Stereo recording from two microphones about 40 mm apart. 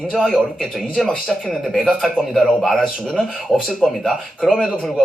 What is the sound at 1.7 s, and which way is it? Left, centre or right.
A man's voice, centre.